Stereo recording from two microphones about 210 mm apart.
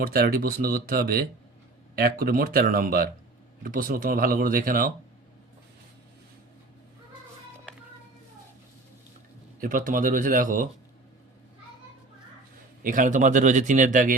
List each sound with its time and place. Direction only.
0.0 s speech: 45° right (ahead or behind)
9.6 s speech: 40° right (ahead or behind)
12.8 s speech: 40° right (ahead or behind)